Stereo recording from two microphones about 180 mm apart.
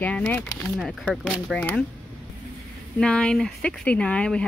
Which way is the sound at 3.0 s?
5° left (ahead or behind).